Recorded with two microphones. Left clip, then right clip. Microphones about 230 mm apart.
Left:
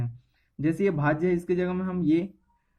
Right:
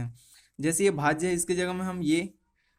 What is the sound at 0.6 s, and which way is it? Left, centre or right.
Speech, right.